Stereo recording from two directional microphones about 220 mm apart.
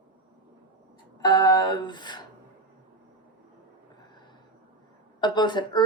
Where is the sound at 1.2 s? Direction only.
20° left (ahead or behind).